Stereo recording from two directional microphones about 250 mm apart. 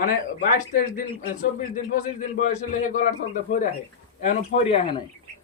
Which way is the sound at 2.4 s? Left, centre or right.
Left.